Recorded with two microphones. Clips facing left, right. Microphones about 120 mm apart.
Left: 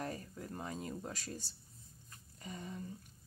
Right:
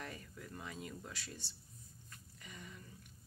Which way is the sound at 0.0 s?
40° left (ahead or behind).